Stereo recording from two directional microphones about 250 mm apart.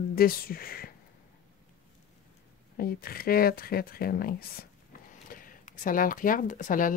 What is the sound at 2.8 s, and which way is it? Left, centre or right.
Speech, left.